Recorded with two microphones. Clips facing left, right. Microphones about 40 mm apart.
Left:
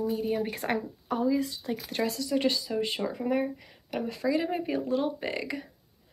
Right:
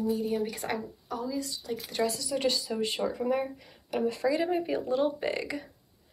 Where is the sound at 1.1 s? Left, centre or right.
Left.